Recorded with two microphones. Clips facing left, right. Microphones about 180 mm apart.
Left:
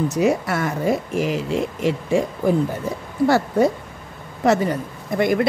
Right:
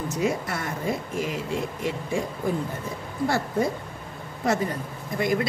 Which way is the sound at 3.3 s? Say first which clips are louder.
Left 7 dB; 80° left.